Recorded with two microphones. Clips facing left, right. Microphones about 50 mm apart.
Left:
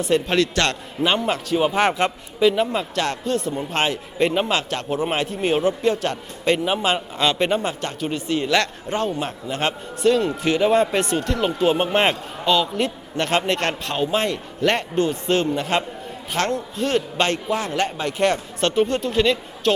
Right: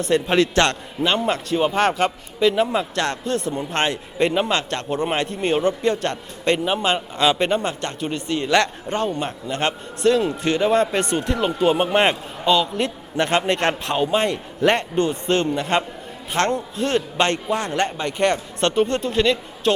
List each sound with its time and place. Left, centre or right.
0.1 s a man's voice: centre
0.6 s a man's voice: right
1.2 s a man's voice: centre
8.4 s a man's voice: centre
14.3 s speech: centre
14.8 s a man's voice: centre